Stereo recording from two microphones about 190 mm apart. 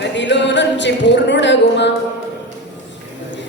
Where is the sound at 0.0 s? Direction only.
70° left (ahead or behind).